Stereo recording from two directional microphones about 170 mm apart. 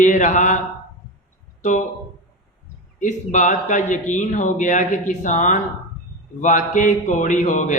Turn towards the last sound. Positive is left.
turn(degrees=45)  # may be behind; listen again after turning